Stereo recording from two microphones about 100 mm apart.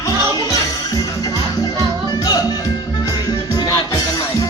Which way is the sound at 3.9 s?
30° left (ahead or behind).